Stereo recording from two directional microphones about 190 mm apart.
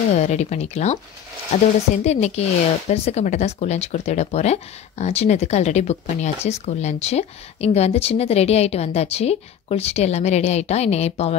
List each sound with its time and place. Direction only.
0.1 s speech: 35° left (ahead or behind)
2.0 s speech: 35° left (ahead or behind)